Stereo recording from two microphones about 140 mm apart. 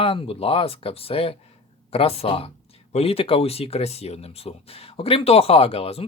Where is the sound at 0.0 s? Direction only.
40° left (ahead or behind).